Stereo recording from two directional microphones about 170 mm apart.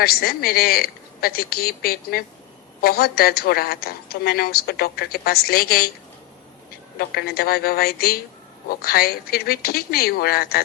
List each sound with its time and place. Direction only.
0.0 s a woman's voice: 65° left (ahead or behind)
7.0 s a woman's voice: 65° left (ahead or behind)